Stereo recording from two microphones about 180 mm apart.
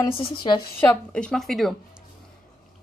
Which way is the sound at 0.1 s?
30° left (ahead or behind).